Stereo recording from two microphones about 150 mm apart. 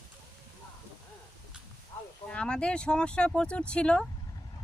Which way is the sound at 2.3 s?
5° left (ahead or behind).